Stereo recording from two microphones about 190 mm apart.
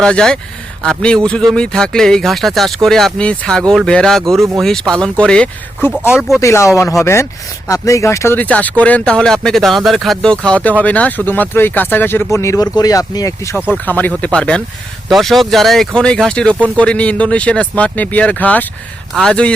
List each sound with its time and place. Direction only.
0.0 s speech: 5° left (ahead or behind)
4.4 s speech: 15° right (ahead or behind)
4.6 s speech: 5° left (ahead or behind)
6.4 s speech: 15° left (ahead or behind)